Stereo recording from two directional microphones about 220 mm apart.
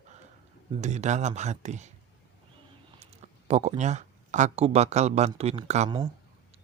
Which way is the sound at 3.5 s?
30° right (ahead or behind).